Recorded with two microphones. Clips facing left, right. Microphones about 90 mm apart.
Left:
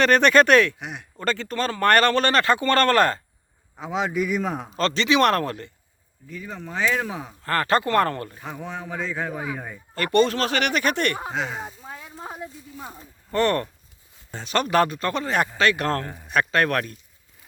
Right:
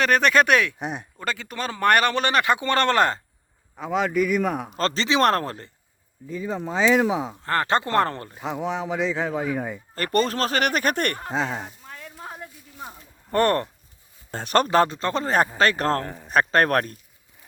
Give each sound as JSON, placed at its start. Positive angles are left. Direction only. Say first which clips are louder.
{"t": 0.0, "sound": "a man's voice", "louder": "left 2 dB", "side_deg": -5}
{"t": 0.8, "sound": "speech", "louder": "right 5 dB", "side_deg": -35}
{"t": 1.2, "sound": "speech", "louder": "left 5 dB", "side_deg": -10}
{"t": 3.8, "sound": "a man's voice", "louder": "right 2 dB", "side_deg": 0}
{"t": 4.8, "sound": "speech", "louder": "left 2 dB", "side_deg": -35}
{"t": 9.9, "sound": "speech", "louder": "left 3 dB", "side_deg": -40}
{"t": 11.4, "sound": "a sound", "louder": "right 1 dB", "side_deg": 10}
{"t": 13.3, "sound": "speech", "louder": "right 1 dB", "side_deg": -45}
{"t": 14.7, "sound": "speech", "louder": "right 1 dB", "side_deg": -25}
{"t": 16.0, "sound": "speech", "louder": "right 2 dB", "side_deg": 10}
{"t": 16.3, "sound": "speech", "louder": "right 2 dB", "side_deg": -40}